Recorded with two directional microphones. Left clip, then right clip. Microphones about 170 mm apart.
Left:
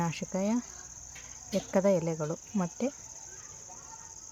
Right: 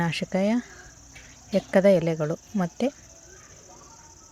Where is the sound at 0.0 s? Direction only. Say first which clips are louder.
Right 7 dB; 20° right (ahead or behind).